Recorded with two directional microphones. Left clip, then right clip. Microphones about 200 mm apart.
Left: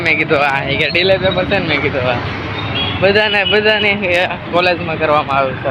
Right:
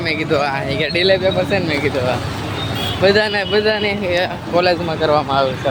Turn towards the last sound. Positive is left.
turn(degrees=-35)  # may be behind; listen again after turning